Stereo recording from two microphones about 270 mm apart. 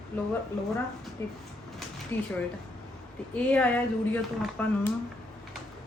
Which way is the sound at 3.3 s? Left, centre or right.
Centre.